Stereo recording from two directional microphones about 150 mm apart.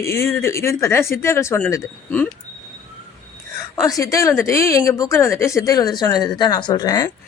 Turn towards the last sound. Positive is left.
turn(degrees=25)  # may be behind; listen again after turning